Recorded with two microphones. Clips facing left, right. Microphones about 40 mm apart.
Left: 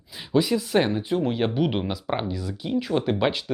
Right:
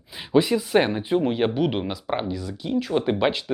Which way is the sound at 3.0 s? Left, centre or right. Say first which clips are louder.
Right 1 dB; centre.